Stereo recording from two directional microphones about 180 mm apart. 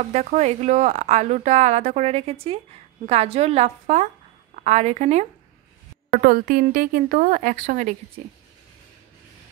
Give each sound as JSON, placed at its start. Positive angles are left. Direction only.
{"t": 0.1, "sound": "a woman's voice", "side_deg": -40}
{"t": 6.2, "sound": "a woman's voice", "side_deg": -55}